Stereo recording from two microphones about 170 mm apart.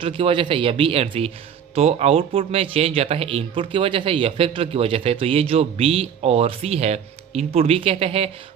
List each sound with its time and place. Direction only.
0.0 s speech: 30° right (ahead or behind)